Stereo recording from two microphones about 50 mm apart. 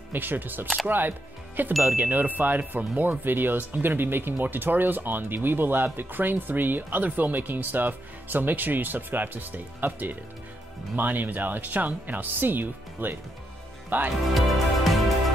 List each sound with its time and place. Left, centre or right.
0.1 s speech: right
1.8 s music: right
2.0 s speech: right
14.3 s music: centre